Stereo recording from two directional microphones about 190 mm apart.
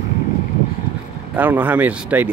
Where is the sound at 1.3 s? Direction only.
10° right (ahead or behind).